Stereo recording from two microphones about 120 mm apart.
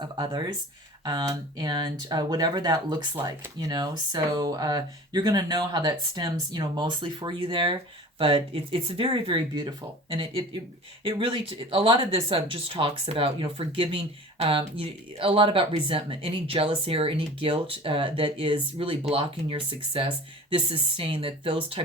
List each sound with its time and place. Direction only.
0.0 s speech: 40° right (ahead or behind)